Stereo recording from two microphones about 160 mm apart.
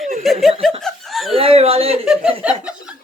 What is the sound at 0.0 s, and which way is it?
Chuckle, centre (ahead or behind).